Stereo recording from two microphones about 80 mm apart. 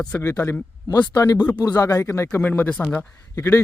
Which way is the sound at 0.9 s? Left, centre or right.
Left.